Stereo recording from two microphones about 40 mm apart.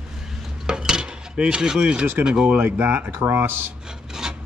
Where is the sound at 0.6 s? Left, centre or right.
Centre.